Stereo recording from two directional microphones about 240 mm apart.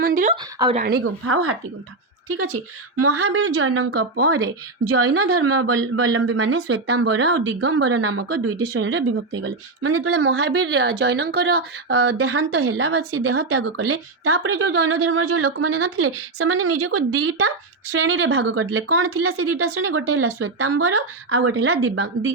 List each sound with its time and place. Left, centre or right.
0.0 s speech: right
1.2 s speech: right
8.7 s speech: right
17.2 s a woman's voice: right
18.5 s speech: right